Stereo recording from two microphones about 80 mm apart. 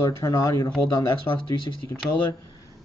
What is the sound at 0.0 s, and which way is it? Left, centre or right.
Speech, left.